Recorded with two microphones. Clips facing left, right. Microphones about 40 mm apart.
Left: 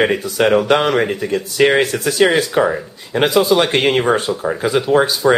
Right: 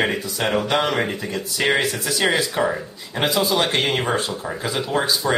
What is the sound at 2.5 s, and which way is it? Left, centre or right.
Speech, centre.